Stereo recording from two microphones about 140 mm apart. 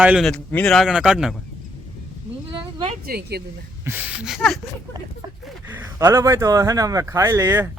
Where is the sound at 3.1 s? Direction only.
90° right.